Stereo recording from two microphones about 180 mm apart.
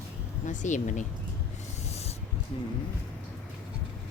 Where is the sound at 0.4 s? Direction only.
45° left (ahead or behind).